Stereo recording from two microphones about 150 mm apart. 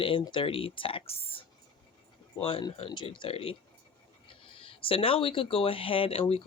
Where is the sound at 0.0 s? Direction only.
30° left (ahead or behind).